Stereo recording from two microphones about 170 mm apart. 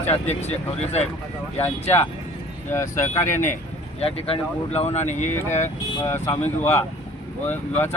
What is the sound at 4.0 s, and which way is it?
Speech, 35° left (ahead or behind).